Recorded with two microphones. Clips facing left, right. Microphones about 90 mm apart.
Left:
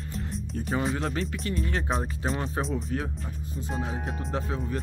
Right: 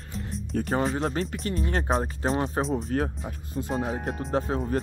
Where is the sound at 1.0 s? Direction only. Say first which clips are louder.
Right 2 dB; 35° right (ahead or behind).